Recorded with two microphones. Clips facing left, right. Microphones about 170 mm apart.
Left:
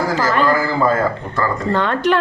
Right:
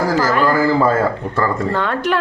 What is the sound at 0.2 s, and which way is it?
A man's voice, 10° right (ahead or behind).